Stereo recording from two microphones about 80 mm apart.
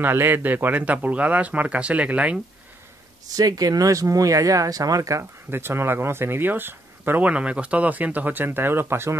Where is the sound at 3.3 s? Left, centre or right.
Right.